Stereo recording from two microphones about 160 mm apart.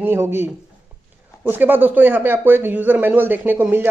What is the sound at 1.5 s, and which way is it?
Speech, 10° right (ahead or behind).